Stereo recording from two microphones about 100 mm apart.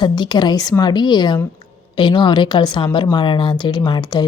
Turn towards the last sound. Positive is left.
turn(degrees=50)  # may be behind; listen again after turning